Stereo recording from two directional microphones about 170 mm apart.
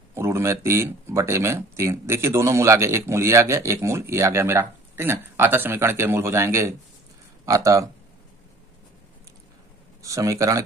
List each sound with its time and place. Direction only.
0.1 s speech: 15° right (ahead or behind)
10.0 s speech: 20° right (ahead or behind)